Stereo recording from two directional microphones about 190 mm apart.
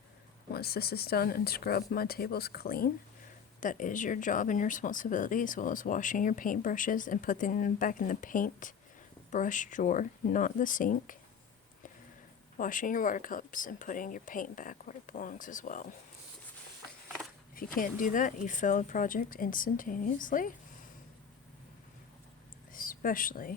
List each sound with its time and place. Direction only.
0.5 s speech: 55° left (ahead or behind)
12.5 s speech: 45° left (ahead or behind)
17.7 s speech: 45° left (ahead or behind)
22.7 s speech: 45° left (ahead or behind)